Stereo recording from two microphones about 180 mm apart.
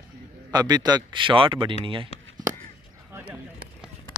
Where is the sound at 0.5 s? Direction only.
20° right (ahead or behind).